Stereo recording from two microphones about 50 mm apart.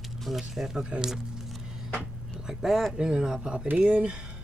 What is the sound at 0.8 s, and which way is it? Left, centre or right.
Speech, centre.